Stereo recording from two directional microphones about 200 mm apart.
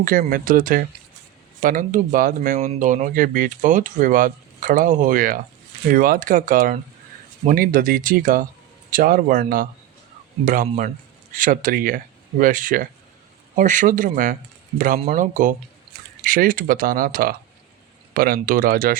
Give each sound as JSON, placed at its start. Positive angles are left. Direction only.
{"t": 0.0, "sound": "speech", "side_deg": -45}